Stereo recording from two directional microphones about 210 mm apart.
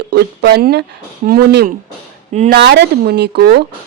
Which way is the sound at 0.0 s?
50° right (ahead or behind).